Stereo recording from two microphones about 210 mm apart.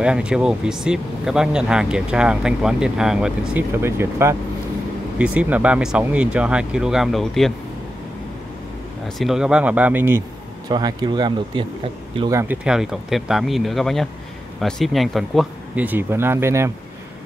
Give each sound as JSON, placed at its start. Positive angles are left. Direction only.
{"t": 0.0, "sound": "speech", "side_deg": -5}
{"t": 9.2, "sound": "speech", "side_deg": -5}